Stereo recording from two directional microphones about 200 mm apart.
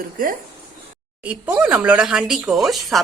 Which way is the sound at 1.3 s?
5° right (ahead or behind).